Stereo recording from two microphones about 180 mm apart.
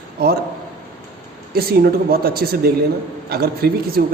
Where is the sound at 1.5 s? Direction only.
60° right (ahead or behind).